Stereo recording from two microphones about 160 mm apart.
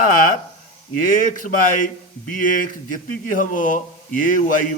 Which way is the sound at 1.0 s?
55° left (ahead or behind).